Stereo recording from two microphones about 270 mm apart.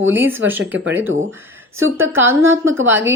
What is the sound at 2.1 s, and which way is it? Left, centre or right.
Speech, centre.